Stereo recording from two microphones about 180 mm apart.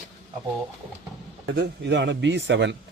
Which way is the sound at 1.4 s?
70° right (ahead or behind).